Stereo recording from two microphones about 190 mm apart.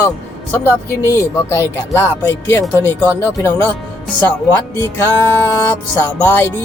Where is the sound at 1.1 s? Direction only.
15° left (ahead or behind).